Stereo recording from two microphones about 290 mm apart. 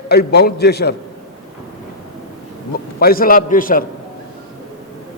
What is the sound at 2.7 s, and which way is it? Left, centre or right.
A man's voice, left.